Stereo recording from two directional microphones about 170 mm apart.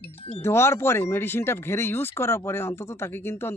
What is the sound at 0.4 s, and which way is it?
Speech, 15° left (ahead or behind).